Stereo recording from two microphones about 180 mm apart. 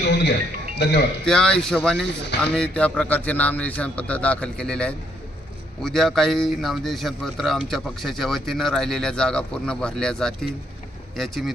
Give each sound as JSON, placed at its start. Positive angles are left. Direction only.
{"t": 0.0, "sound": "music", "side_deg": 70}
{"t": 0.8, "sound": "speech", "side_deg": 70}
{"t": 1.2, "sound": "a man's voice", "side_deg": 5}